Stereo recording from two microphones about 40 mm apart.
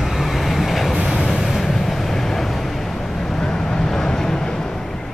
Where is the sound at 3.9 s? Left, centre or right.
Centre.